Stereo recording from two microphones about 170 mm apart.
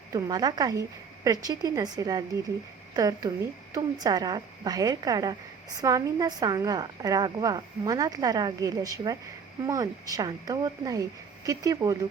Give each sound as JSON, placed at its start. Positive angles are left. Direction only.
{"t": 0.1, "sound": "a woman's voice", "side_deg": -25}